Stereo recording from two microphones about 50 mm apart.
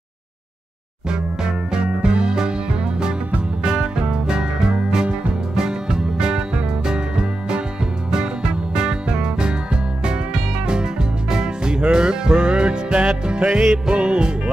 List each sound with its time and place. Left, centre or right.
1.1 s music: centre